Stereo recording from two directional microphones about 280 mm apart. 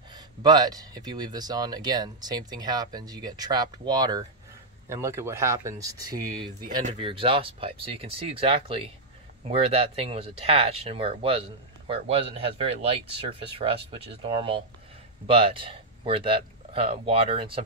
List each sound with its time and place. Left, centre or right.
0.1 s speech: centre